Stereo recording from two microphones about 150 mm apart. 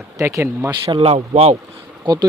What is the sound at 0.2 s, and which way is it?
Speech, 20° right (ahead or behind).